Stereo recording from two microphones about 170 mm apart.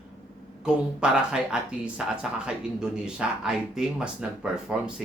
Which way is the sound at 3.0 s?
5° right (ahead or behind).